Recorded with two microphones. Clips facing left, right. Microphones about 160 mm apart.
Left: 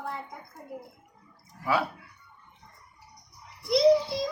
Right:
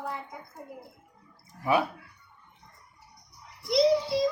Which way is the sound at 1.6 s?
20° right (ahead or behind).